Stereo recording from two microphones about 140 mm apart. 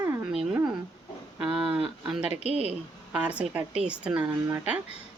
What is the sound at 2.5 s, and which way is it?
Speech, 45° right (ahead or behind).